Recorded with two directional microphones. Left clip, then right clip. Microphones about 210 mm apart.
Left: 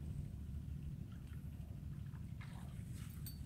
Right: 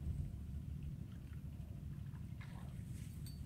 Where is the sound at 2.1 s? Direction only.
Centre (ahead or behind).